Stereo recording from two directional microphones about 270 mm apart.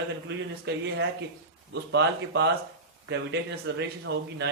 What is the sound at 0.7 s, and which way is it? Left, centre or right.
Speech, right.